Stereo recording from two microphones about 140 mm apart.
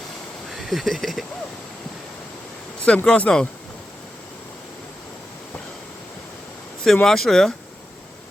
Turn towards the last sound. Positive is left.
turn(degrees=5)  # may be behind; listen again after turning